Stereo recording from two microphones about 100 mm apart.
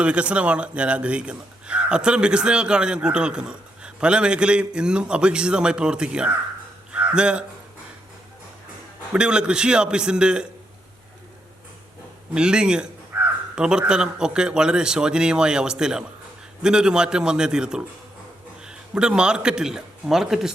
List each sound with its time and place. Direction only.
0.0 s a man's voice: 10° right (ahead or behind)
6.9 s a sound: 10° right (ahead or behind)
9.1 s a man's voice: 10° right (ahead or behind)
12.3 s a man's voice: 10° right (ahead or behind)
13.1 s crow: 20° right (ahead or behind)
13.6 s a man's voice: 10° right (ahead or behind)